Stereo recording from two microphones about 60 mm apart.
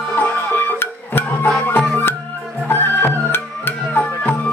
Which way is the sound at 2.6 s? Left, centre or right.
Left.